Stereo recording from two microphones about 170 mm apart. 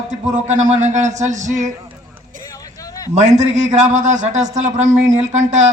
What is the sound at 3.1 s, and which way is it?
A man's voice, 45° right (ahead or behind).